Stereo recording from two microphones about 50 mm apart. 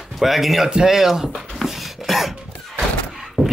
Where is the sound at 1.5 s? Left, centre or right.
Centre.